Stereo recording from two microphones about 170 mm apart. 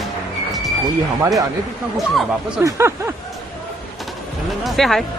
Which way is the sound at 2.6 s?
15° right (ahead or behind).